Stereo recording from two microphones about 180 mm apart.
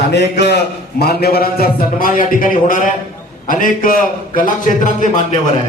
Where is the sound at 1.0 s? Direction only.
60° left (ahead or behind).